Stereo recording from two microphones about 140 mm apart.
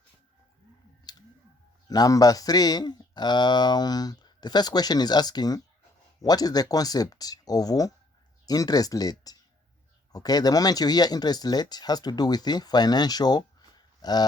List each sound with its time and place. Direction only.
1.9 s speech: 25° left (ahead or behind)